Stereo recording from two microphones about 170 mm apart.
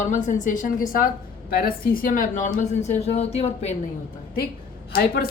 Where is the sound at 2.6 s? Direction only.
45° left (ahead or behind).